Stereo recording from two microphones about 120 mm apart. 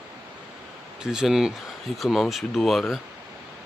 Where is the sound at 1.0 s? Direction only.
5° right (ahead or behind).